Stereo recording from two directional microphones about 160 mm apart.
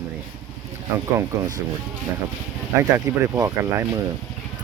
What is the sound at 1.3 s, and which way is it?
Speech, 20° right (ahead or behind).